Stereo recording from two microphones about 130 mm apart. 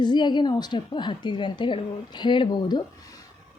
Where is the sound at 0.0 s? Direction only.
35° left (ahead or behind).